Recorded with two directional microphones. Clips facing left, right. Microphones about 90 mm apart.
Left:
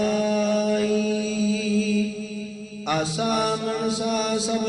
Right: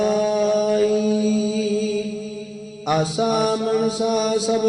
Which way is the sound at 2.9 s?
10° right (ahead or behind).